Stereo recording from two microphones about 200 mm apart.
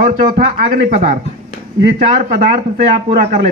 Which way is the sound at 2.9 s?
35° right (ahead or behind).